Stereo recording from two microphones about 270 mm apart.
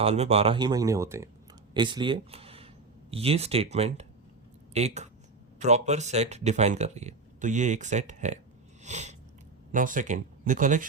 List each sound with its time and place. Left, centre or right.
0.0 s speech: right
8.8 s a sound: right
9.7 s speech: right